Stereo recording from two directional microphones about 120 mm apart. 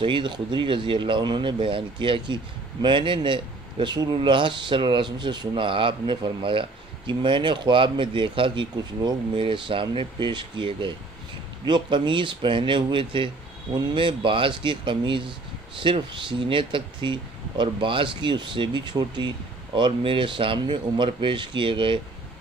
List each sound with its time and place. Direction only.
0.0 s speech: 45° right (ahead or behind)